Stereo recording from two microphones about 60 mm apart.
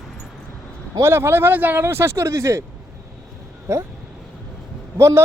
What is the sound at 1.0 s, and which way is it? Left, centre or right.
Speech, right.